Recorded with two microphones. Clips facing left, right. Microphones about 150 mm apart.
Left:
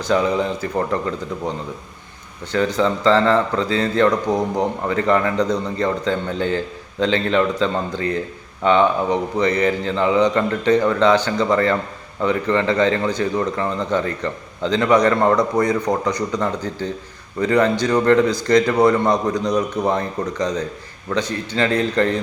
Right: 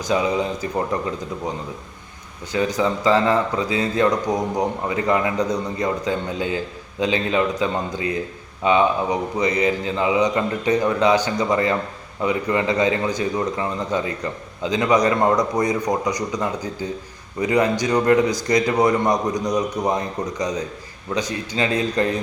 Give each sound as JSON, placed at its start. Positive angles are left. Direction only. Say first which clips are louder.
{"t": 0.0, "sound": "a man's voice", "louder": "left 2 dB", "side_deg": -15}